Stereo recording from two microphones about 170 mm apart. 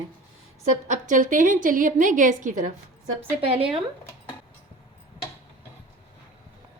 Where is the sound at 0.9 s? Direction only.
50° right (ahead or behind).